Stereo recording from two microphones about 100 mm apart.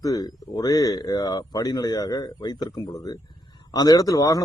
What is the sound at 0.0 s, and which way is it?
A man's voice, 35° left (ahead or behind).